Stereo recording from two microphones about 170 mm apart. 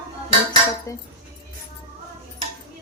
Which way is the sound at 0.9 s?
20° left (ahead or behind).